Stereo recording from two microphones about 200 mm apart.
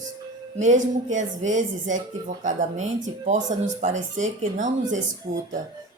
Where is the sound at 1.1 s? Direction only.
40° right (ahead or behind).